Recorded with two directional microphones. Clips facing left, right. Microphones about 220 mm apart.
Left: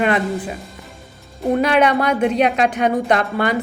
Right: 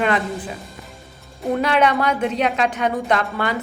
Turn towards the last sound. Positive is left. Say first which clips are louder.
# left 3 dB
turn(degrees=15)  # may be behind; listen again after turning